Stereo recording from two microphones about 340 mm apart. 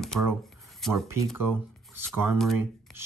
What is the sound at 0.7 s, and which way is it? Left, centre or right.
Speech, centre.